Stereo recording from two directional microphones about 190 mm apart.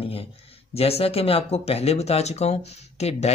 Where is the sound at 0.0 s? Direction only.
30° left (ahead or behind).